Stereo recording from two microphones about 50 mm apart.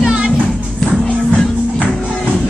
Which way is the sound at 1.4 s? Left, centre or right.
Centre.